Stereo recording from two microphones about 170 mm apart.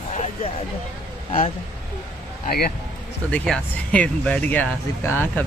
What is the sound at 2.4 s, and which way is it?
Speech, 65° left (ahead or behind).